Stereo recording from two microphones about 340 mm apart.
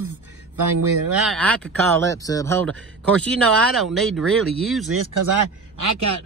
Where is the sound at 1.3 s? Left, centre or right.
Centre.